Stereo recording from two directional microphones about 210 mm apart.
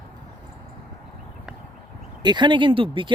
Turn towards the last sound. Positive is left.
turn(degrees=-25)  # may be behind; listen again after turning